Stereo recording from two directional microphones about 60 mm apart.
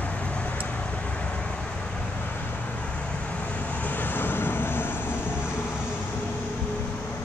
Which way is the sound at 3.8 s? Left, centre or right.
Left.